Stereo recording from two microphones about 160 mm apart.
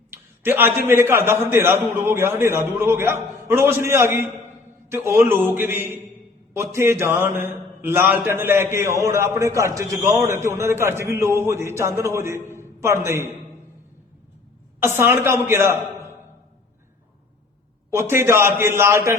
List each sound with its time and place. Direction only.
0.1 s a man's voice: 15° right (ahead or behind)
14.8 s a man's voice: 15° right (ahead or behind)
17.9 s a man's voice: 15° right (ahead or behind)